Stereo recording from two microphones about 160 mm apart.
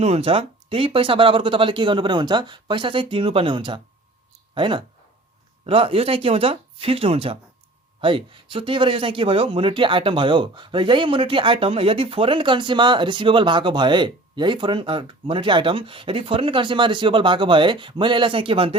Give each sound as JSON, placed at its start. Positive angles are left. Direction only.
{"t": 0.0, "sound": "speech", "side_deg": -40}